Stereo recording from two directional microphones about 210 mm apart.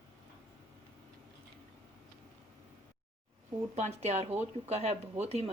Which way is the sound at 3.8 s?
30° right (ahead or behind).